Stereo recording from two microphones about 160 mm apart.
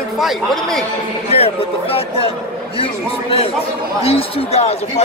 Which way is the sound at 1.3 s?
40° left (ahead or behind).